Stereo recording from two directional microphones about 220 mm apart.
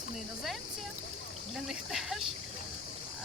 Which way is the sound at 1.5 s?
Centre (ahead or behind).